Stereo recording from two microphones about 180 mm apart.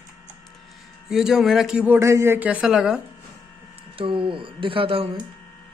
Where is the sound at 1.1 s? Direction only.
Centre (ahead or behind).